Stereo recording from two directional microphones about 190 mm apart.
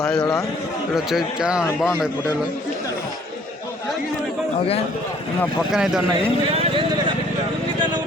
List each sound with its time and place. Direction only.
0.0 s a man's voice: 5° left (ahead or behind)
0.9 s speech: 5° right (ahead or behind)
5.4 s speech: centre (ahead or behind)
6.5 s vehicle: 30° right (ahead or behind)